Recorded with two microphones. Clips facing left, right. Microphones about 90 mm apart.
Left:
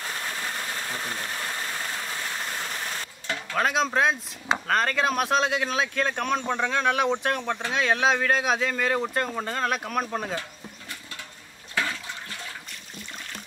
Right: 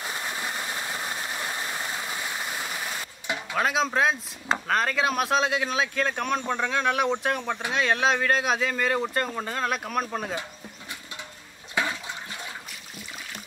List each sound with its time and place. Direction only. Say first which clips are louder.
0.0 s a sound: even; 15° right (ahead or behind)
3.6 s speech: left 1 dB; centre (ahead or behind)
11.7 s toilet flush: right 1 dB; 20° right (ahead or behind)